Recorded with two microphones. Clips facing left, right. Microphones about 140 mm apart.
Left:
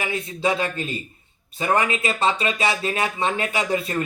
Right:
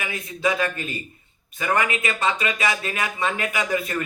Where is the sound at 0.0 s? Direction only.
30° left (ahead or behind).